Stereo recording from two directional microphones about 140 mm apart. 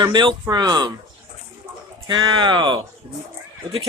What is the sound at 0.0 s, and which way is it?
Speech, 30° right (ahead or behind).